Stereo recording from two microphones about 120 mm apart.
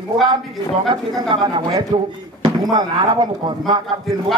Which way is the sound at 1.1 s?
40° right (ahead or behind).